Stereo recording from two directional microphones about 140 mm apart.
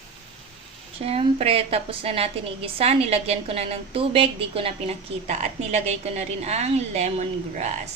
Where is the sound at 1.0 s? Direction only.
45° right (ahead or behind).